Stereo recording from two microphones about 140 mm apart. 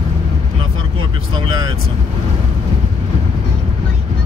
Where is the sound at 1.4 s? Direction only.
30° right (ahead or behind).